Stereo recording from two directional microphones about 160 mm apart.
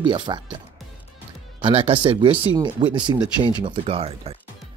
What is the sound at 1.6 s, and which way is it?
Speech, 35° right (ahead or behind).